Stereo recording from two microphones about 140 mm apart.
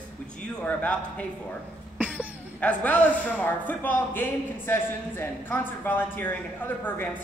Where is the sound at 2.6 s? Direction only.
10° left (ahead or behind).